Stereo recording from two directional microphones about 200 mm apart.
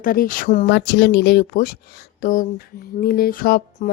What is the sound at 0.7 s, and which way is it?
Speech, 50° left (ahead or behind).